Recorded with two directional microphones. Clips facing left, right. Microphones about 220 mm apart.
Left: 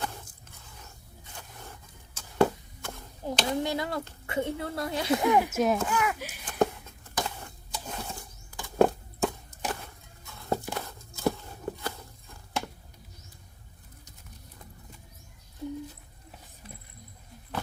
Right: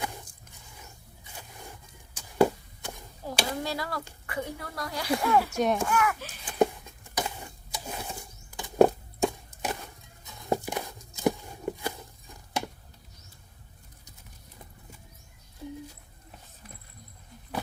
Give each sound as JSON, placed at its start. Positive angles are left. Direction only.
{"t": 0.0, "sound": "scrape", "side_deg": -15}
{"t": 2.1, "sound": "a sound", "side_deg": -15}
{"t": 3.2, "sound": "speech", "side_deg": 20}
{"t": 5.5, "sound": "speech", "side_deg": 0}
{"t": 5.8, "sound": "speech", "side_deg": 20}
{"t": 6.4, "sound": "a sound", "side_deg": -10}